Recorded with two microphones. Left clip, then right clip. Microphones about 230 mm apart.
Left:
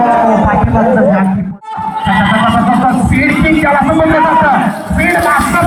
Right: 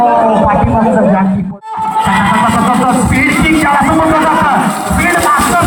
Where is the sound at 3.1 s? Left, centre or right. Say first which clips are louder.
Right 1 dB; centre.